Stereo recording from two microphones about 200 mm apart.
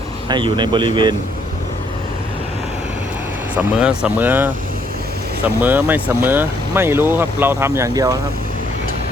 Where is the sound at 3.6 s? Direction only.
5° right (ahead or behind).